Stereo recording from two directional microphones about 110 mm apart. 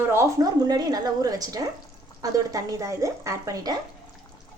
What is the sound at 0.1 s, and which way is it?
A woman's voice, 30° right (ahead or behind).